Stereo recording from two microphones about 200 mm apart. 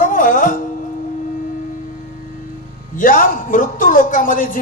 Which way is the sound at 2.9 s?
40° left (ahead or behind).